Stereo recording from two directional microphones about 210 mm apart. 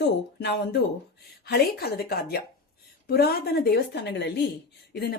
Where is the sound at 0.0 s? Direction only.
55° left (ahead or behind).